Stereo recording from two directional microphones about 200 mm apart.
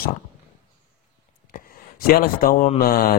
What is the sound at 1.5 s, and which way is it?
Speech, 50° left (ahead or behind).